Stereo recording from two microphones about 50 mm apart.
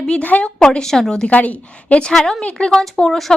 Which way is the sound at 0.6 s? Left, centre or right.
Centre.